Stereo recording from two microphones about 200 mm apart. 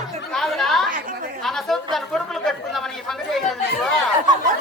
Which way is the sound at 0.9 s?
45° right (ahead or behind).